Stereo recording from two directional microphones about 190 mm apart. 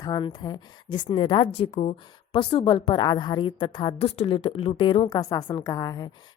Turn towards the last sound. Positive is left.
turn(degrees=20)  # may be behind; listen again after turning